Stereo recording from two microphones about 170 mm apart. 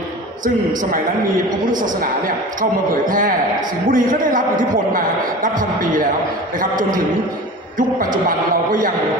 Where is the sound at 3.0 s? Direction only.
55° right (ahead or behind).